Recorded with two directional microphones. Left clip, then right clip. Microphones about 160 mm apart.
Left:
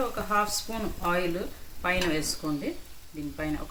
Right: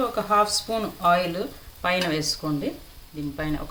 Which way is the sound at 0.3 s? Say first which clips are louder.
Right 7 dB; 45° right (ahead or behind).